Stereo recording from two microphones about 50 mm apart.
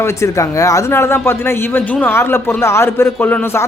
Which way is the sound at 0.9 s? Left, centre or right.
Left.